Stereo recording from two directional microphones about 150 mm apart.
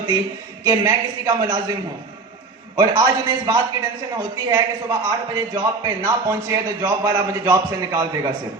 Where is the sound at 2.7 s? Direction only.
25° right (ahead or behind).